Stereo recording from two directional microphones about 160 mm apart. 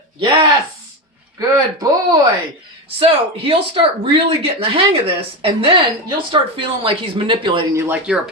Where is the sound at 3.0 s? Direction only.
35° right (ahead or behind).